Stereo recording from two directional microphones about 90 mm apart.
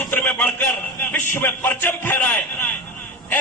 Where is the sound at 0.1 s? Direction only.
20° left (ahead or behind).